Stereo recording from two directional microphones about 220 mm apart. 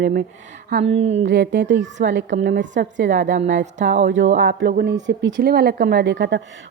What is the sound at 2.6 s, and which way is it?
Speech, 55° right (ahead or behind).